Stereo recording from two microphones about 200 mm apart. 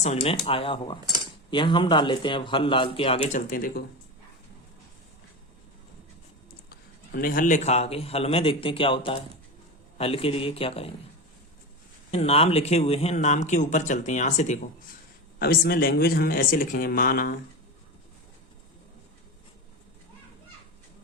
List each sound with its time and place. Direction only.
0.0 s a man's voice: 35° left (ahead or behind)
6.7 s a man's voice: 50° left (ahead or behind); by 10.9 s 30° left (ahead or behind)
12.1 s a man's voice: 30° left (ahead or behind)
15.4 s speech: 50° left (ahead or behind)